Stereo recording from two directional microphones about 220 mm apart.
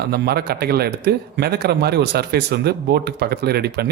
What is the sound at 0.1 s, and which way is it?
Speech, 45° right (ahead or behind).